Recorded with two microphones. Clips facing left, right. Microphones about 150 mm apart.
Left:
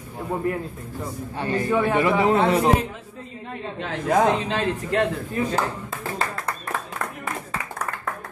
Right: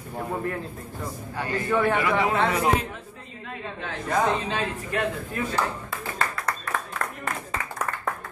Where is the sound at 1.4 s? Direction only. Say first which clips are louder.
Left 2 dB; 25° left (ahead or behind).